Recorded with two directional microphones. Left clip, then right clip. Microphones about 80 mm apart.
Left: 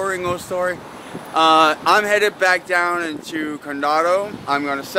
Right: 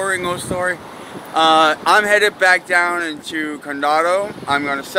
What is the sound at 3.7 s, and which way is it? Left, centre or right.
Speech, left.